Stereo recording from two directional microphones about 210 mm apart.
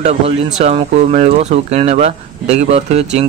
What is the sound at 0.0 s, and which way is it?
Speech, 30° right (ahead or behind).